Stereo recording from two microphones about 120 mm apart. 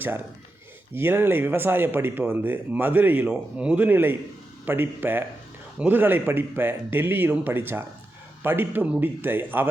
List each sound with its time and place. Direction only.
0.9 s speech: 20° right (ahead or behind)